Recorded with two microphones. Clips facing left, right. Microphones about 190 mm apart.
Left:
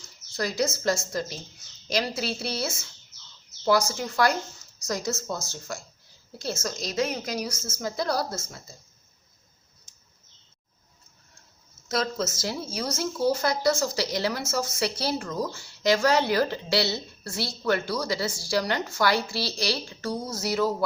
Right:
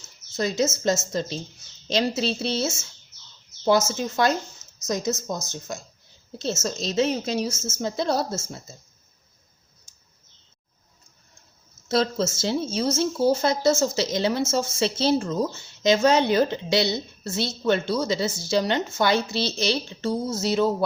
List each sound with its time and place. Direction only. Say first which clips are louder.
0.0 s speech: right 4 dB; 20° right (ahead or behind)
11.9 s speech: right 5 dB; 30° right (ahead or behind)